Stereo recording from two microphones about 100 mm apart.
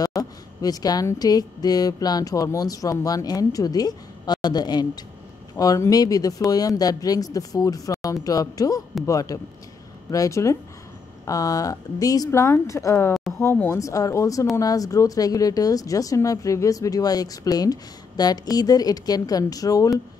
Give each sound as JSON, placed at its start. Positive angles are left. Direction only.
{"t": 0.0, "sound": "a woman's voice", "side_deg": 40}